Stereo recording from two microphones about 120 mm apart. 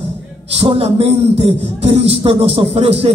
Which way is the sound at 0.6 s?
50° right (ahead or behind).